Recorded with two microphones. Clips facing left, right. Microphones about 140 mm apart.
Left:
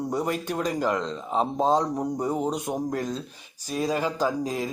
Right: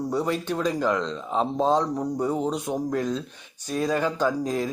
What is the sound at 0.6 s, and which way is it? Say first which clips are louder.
Speech: right 2 dB; 10° left (ahead or behind).